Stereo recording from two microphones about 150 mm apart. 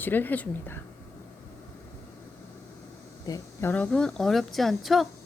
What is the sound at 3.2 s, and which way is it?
Speech, 20° left (ahead or behind).